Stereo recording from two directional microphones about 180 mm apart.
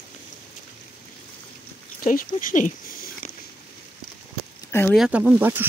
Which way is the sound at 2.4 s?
45° left (ahead or behind).